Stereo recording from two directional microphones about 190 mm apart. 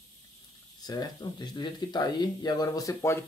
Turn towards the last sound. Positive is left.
turn(degrees=15)  # may be behind; listen again after turning